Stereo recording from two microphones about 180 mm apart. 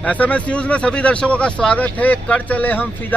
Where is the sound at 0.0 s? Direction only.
10° left (ahead or behind).